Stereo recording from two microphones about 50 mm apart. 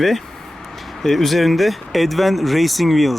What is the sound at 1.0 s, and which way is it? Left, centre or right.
Speech, centre.